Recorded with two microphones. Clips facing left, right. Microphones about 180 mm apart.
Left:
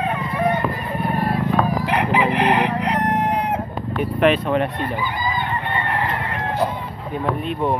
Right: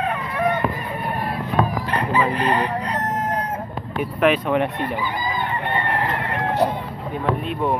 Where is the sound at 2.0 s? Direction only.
90° left; by 3.3 s 70° left (ahead or behind).